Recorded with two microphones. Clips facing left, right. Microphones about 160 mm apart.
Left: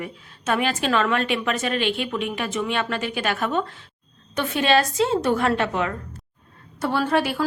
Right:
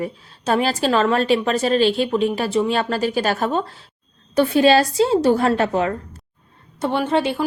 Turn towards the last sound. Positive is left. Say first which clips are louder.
# right 2 dB
turn(degrees=-25)  # may be behind; listen again after turning